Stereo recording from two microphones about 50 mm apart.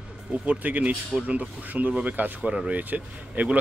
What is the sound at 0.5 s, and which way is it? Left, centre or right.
Speech, right.